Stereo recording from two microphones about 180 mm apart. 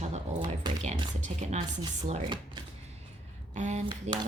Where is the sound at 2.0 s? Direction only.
30° right (ahead or behind).